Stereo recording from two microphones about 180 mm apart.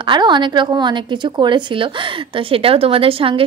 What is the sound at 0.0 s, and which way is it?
A woman's voice, 25° right (ahead or behind).